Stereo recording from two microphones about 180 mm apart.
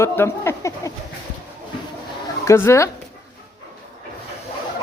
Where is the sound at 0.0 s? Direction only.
15° left (ahead or behind).